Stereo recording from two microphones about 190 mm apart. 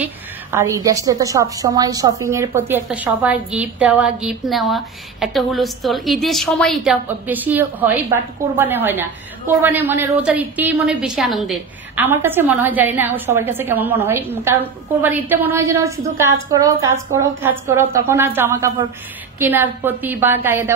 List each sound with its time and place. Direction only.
0.0 s a woman's voice: 15° right (ahead or behind)